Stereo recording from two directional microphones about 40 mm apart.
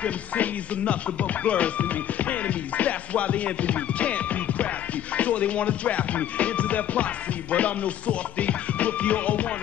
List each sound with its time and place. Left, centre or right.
0.0 s music: left